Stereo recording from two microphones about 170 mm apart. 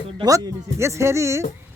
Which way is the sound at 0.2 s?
20° right (ahead or behind).